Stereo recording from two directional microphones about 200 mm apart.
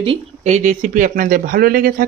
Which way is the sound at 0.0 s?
30° right (ahead or behind).